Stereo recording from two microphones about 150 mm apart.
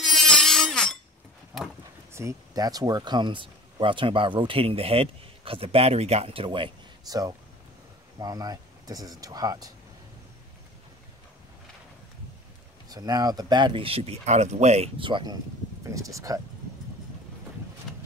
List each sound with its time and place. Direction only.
0.0 s a sound: centre (ahead or behind)
2.1 s speech: 20° right (ahead or behind)
12.9 s speech: 25° right (ahead or behind)